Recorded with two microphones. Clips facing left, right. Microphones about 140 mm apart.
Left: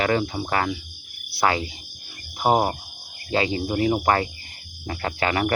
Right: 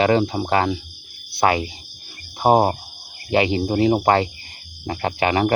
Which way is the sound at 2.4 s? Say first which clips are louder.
Right 4 dB; 25° right (ahead or behind).